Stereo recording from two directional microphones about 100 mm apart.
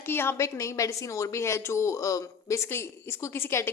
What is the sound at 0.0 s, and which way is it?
A woman's voice, 25° left (ahead or behind).